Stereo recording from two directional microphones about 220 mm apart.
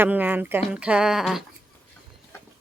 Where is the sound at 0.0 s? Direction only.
10° right (ahead or behind).